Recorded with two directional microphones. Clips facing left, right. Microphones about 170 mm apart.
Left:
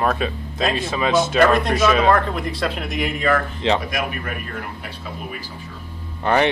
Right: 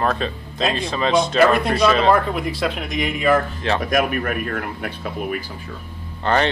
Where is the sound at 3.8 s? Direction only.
55° right (ahead or behind).